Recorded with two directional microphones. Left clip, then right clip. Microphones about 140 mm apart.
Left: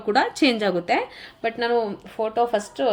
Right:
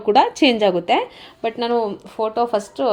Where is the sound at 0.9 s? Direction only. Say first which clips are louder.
Right 4 dB; 25° right (ahead or behind).